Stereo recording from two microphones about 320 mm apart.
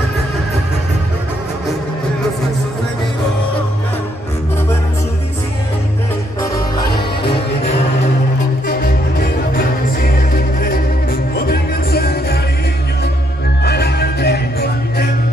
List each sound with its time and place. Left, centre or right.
8.6 s music: left
13.7 s music: left